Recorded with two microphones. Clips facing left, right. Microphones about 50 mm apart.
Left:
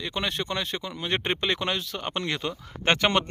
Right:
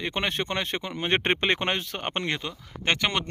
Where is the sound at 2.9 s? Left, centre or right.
Centre.